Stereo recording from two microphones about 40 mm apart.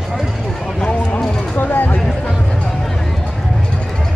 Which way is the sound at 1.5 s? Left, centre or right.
Left.